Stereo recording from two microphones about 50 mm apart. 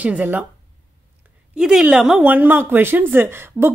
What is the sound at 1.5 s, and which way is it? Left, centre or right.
Speech, centre.